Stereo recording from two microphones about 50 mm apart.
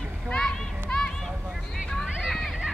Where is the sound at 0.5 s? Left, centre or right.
Centre.